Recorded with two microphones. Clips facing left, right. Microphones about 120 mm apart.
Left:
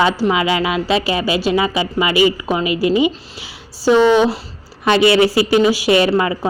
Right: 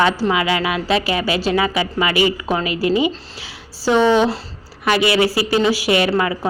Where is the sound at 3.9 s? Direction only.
20° right (ahead or behind).